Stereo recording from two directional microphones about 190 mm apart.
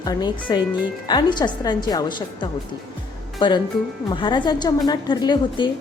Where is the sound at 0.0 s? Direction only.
20° left (ahead or behind).